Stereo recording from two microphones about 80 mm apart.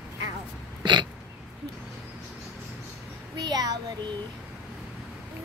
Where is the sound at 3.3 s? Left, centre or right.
Right.